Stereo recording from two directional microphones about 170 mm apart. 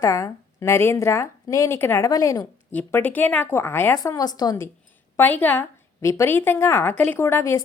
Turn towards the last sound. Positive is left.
turn(degrees=15)  # may be behind; listen again after turning